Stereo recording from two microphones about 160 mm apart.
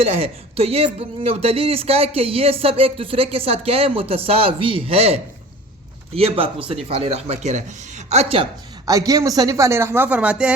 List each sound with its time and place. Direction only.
0.0 s speech: 40° right (ahead or behind)
8.9 s speech: 20° right (ahead or behind)